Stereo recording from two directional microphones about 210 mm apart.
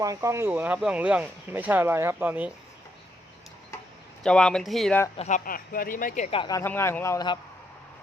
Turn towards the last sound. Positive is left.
turn(degrees=20)  # may be behind; listen again after turning